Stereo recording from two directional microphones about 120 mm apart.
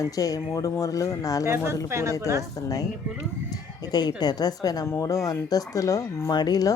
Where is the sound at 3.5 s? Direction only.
35° left (ahead or behind).